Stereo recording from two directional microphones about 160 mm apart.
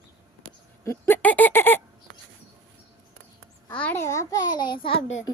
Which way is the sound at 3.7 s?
10° left (ahead or behind).